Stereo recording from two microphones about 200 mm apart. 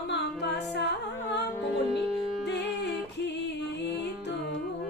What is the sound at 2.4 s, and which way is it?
Music, 60° left (ahead or behind).